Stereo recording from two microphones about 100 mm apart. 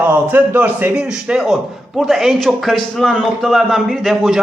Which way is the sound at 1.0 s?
5° right (ahead or behind).